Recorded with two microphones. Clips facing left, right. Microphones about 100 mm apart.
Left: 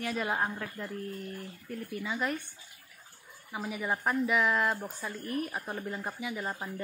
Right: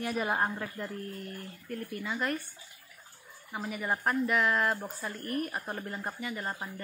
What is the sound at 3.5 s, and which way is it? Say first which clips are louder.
Speech: even; 5° left (ahead or behind).